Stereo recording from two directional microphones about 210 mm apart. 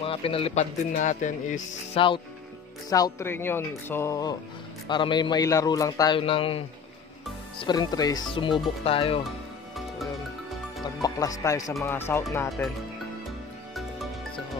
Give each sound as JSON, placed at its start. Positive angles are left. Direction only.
{"t": 0.0, "sound": "a man's voice", "side_deg": 25}
{"t": 2.0, "sound": "a man's voice", "side_deg": 25}
{"t": 7.6, "sound": "a man's voice", "side_deg": 20}
{"t": 10.8, "sound": "speech", "side_deg": 15}
{"t": 12.4, "sound": "speech", "side_deg": 0}